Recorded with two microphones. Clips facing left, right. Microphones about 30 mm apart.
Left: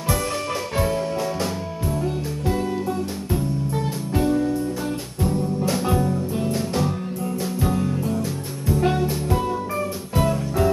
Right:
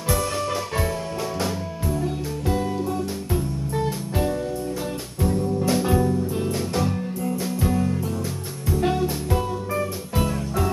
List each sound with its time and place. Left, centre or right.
1.9 s music: centre